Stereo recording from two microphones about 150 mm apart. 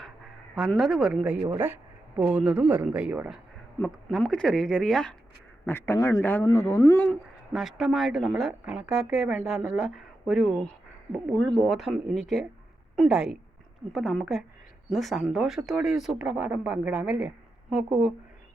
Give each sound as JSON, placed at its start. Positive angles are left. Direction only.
{"t": 0.5, "sound": "speech", "side_deg": 0}
{"t": 3.8, "sound": "speech", "side_deg": 5}
{"t": 5.6, "sound": "a man's voice", "side_deg": 15}
{"t": 7.5, "sound": "speech", "side_deg": 0}